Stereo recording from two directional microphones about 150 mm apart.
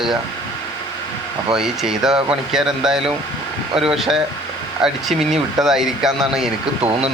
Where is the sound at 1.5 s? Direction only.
5° right (ahead or behind).